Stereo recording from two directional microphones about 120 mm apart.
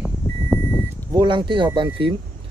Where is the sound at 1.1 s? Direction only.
35° right (ahead or behind).